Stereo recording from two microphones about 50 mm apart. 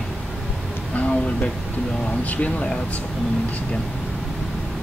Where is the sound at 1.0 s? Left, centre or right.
Left.